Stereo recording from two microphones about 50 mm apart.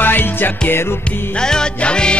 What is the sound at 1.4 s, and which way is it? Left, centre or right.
Music, centre.